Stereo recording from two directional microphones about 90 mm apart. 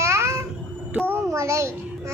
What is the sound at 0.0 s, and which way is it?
Babbling, 30° right (ahead or behind).